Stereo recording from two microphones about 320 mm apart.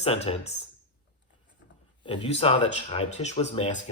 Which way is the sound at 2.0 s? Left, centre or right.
Centre.